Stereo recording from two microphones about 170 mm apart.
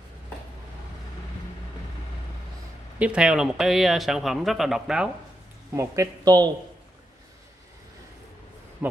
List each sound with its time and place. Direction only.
3.0 s speech: 5° right (ahead or behind)
5.8 s speech: 20° right (ahead or behind)